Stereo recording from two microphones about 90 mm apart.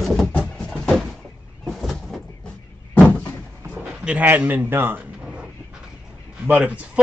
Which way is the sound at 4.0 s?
15° right (ahead or behind).